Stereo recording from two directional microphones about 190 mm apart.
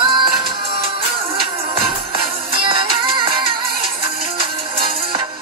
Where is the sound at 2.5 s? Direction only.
25° right (ahead or behind).